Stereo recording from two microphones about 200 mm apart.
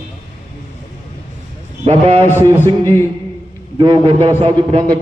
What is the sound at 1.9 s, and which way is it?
Speech, 30° right (ahead or behind).